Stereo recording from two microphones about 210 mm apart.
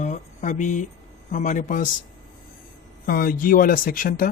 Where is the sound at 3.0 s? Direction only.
45° left (ahead or behind).